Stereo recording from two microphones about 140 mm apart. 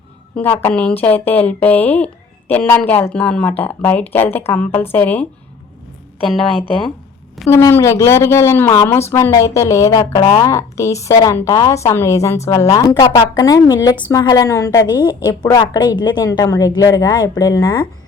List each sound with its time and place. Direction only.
0.6 s speech: 10° left (ahead or behind)
7.5 s a woman's voice: 20° left (ahead or behind)